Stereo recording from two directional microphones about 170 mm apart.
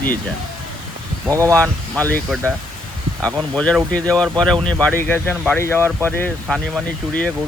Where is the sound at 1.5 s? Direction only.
10° left (ahead or behind).